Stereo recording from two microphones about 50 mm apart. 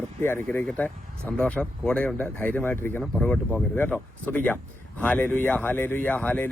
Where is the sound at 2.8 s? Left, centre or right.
Left.